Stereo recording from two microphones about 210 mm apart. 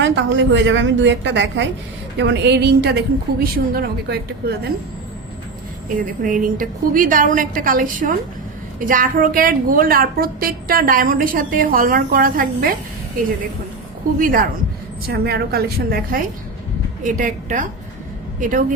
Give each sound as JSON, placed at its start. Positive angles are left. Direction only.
{"t": 0.0, "sound": "a woman's voice", "side_deg": -60}
{"t": 6.0, "sound": "a woman's voice", "side_deg": -40}
{"t": 14.2, "sound": "a woman's voice", "side_deg": -45}